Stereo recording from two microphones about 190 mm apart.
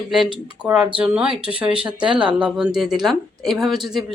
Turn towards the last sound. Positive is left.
turn(degrees=0)  # may be behind; listen again after turning